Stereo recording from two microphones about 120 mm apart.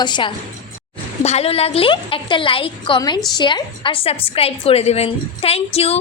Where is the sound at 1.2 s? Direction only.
60° left (ahead or behind).